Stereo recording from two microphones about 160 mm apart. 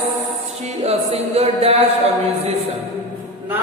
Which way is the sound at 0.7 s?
40° right (ahead or behind).